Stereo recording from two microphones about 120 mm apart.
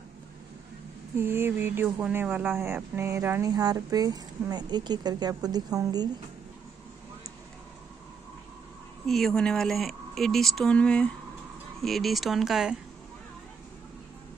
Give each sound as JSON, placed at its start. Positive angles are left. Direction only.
{"t": 1.1, "sound": "speech", "side_deg": -20}
{"t": 3.4, "sound": "speech", "side_deg": -35}
{"t": 9.0, "sound": "speech", "side_deg": 5}